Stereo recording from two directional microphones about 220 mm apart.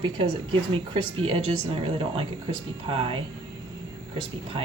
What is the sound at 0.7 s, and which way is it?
Speech, 25° right (ahead or behind).